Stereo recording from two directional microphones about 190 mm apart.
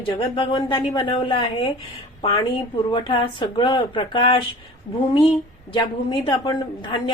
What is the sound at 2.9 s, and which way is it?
A woman's voice, 25° left (ahead or behind).